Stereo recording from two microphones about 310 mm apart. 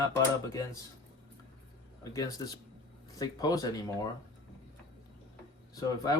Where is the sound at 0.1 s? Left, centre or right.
Centre.